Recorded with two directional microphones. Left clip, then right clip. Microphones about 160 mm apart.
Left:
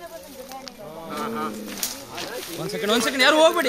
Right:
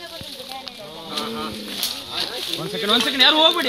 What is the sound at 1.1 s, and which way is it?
Speech, 70° right (ahead or behind).